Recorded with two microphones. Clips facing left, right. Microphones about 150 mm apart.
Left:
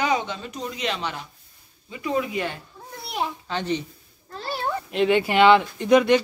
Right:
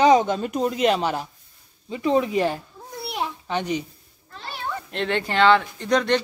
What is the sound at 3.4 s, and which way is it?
Speech, 15° right (ahead or behind).